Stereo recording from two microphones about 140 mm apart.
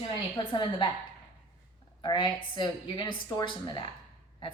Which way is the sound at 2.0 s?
35° left (ahead or behind).